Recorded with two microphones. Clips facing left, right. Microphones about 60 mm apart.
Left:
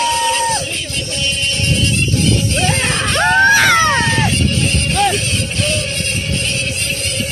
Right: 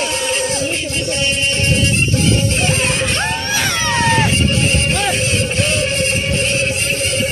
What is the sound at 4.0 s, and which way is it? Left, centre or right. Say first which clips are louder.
Music: right 1 dB; right.